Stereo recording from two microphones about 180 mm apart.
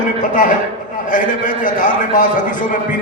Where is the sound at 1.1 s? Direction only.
45° left (ahead or behind).